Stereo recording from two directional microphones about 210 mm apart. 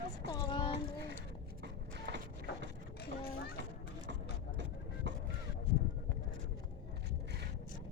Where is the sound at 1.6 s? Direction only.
55° right (ahead or behind).